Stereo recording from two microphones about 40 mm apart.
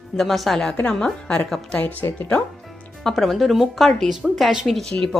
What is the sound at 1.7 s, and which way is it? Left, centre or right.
Speech, left.